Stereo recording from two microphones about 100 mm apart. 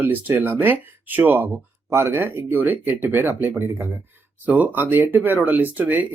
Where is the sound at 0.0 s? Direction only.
20° right (ahead or behind).